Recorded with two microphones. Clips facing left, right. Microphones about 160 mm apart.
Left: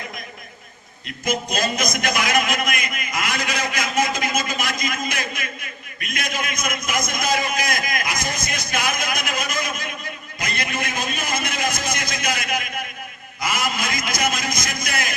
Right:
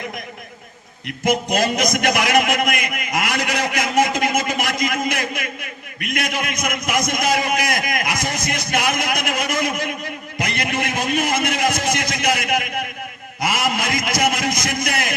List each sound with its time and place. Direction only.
1.2 s a man's voice: 70° right (ahead or behind)